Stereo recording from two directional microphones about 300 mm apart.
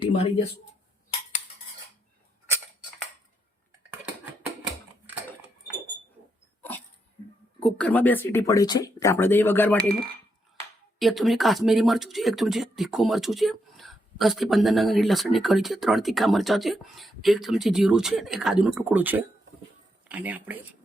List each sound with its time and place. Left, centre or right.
0.0 s a sound: centre
6.6 s dog: centre
7.6 s speech: centre
11.0 s speech: centre